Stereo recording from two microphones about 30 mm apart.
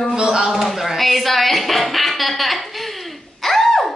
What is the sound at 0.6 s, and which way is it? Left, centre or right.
Music, centre.